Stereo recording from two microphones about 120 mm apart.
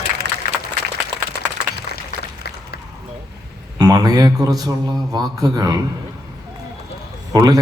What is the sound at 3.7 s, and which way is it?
A man's voice, 30° right (ahead or behind).